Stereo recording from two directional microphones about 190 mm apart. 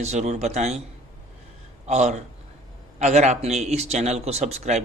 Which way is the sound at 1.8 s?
35° right (ahead or behind).